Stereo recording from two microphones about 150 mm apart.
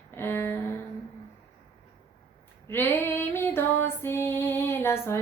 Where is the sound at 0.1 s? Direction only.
15° left (ahead or behind).